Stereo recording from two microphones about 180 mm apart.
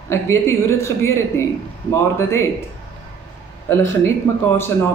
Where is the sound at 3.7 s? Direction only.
15° left (ahead or behind).